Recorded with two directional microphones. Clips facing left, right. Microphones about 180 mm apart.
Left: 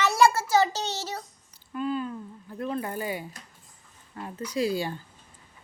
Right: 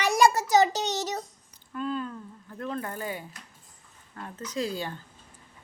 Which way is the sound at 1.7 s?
10° left (ahead or behind).